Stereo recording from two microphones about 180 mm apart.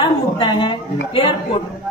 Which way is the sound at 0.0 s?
25° left (ahead or behind).